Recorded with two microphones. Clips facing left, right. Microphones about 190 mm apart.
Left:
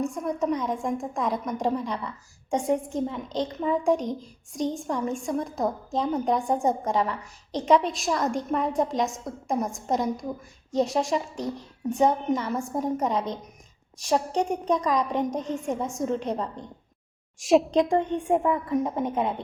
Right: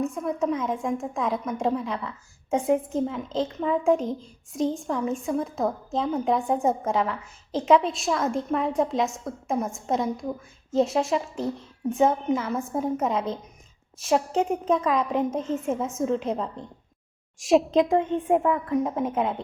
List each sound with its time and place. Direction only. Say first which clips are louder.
0.0 s a woman's voice: right 1 dB; centre (ahead or behind)